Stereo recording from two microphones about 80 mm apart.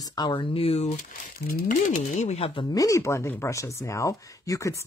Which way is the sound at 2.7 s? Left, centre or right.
Left.